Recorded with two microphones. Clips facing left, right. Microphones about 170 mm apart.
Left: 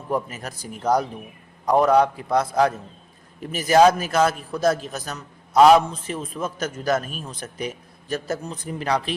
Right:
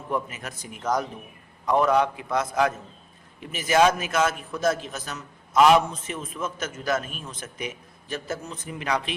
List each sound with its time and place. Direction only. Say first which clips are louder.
0.1 s a man's voice: left 3 dB; 40° left (ahead or behind)